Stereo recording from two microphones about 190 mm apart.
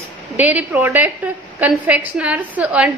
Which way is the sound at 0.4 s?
10° right (ahead or behind).